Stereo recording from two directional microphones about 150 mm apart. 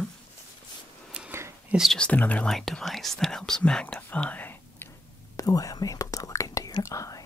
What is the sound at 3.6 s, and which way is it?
Whispering, 5° left (ahead or behind).